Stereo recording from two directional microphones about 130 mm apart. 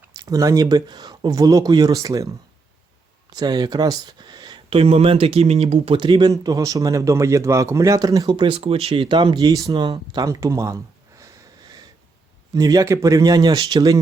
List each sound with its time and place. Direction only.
0.2 s speech: 25° right (ahead or behind)
8.3 s speech: 40° right (ahead or behind); by 10.8 s 25° right (ahead or behind)
12.5 s speech: 30° right (ahead or behind)